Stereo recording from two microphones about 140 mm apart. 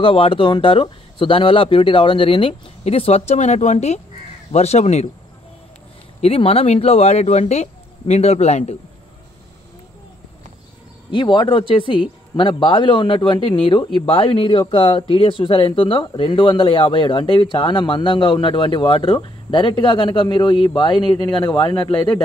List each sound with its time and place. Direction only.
0.0 s speech: 40° left (ahead or behind)
6.2 s speech: 45° left (ahead or behind)
11.1 s speech: 35° left (ahead or behind)